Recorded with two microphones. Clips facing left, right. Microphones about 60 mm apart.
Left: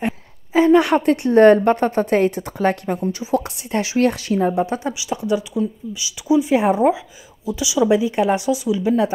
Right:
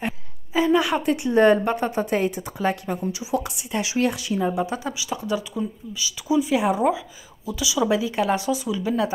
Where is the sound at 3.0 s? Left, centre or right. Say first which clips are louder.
Left 5 dB; left.